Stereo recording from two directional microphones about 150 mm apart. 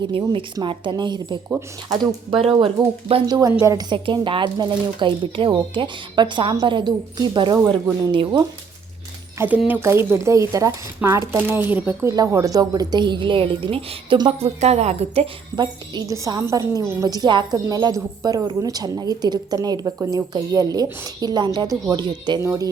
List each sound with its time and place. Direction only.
0.1 s speech: 35° right (ahead or behind)
1.5 s speech: 15° right (ahead or behind)
2.3 s speech: 40° right (ahead or behind)
3.2 s a woman's voice: 25° right (ahead or behind)
9.6 s a woman's voice: 15° right (ahead or behind)